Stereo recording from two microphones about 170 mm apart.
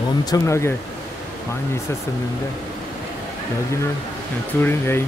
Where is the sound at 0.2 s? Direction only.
20° left (ahead or behind).